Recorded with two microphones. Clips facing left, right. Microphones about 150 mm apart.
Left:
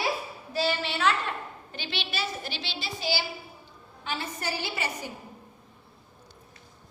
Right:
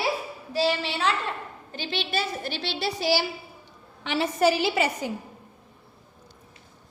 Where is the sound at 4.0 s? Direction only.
85° right.